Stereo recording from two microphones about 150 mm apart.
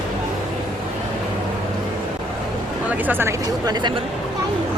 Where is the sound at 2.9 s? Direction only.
10° right (ahead or behind).